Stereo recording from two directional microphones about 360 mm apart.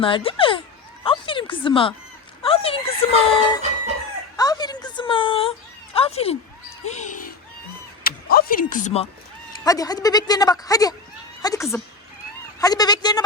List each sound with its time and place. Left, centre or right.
0.0 s a woman's voice: centre